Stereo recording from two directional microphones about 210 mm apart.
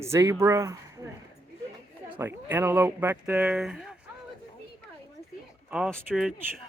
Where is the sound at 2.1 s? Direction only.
10° right (ahead or behind).